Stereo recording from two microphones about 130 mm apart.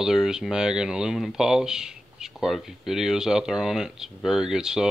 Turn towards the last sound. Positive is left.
turn(degrees=-5)  # may be behind; listen again after turning